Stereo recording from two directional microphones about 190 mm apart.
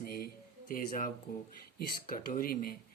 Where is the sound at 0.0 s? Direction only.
50° left (ahead or behind).